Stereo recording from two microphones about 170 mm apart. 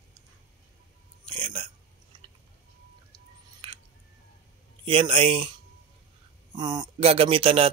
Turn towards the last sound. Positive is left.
turn(degrees=-35)  # may be behind; listen again after turning